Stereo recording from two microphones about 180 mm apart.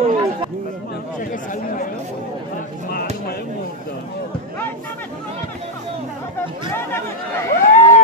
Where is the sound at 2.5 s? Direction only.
60° left (ahead or behind).